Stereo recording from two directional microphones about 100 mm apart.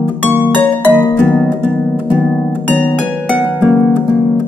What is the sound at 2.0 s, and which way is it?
Music, 15° right (ahead or behind).